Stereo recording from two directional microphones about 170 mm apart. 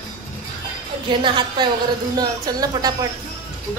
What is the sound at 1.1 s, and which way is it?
Speech, 30° right (ahead or behind).